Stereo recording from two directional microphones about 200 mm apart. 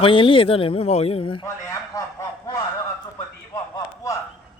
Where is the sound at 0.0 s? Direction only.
25° left (ahead or behind).